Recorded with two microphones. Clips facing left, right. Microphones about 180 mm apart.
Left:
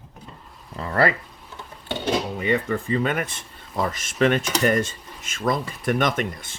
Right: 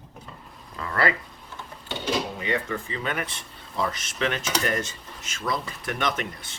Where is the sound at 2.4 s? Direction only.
55° left (ahead or behind).